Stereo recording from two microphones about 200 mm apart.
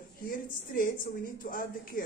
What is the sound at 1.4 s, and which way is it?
Speech, 45° left (ahead or behind).